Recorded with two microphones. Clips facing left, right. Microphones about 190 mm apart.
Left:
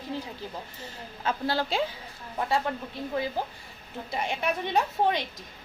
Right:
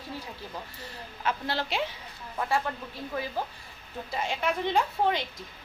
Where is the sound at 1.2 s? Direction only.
30° left (ahead or behind).